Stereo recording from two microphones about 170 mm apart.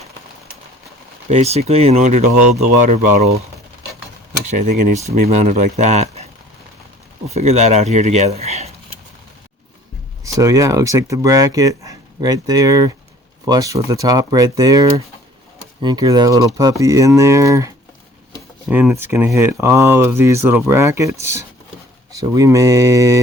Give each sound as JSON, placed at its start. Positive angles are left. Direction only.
{"t": 1.3, "sound": "speech", "side_deg": -40}
{"t": 4.4, "sound": "speech", "side_deg": -45}
{"t": 7.3, "sound": "speech", "side_deg": -40}
{"t": 10.2, "sound": "speech", "side_deg": -20}
{"t": 18.7, "sound": "speech", "side_deg": -10}